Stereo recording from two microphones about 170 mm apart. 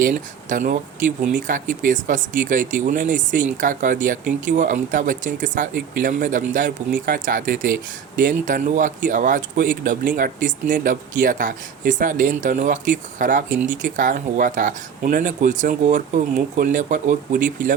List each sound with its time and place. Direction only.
0.0 s speech: 50° right (ahead or behind)